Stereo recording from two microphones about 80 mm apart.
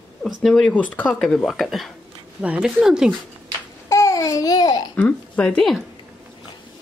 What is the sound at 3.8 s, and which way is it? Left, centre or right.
Babbling, left.